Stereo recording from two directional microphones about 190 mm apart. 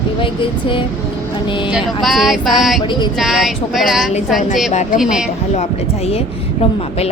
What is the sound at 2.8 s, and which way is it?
Speech, 25° left (ahead or behind).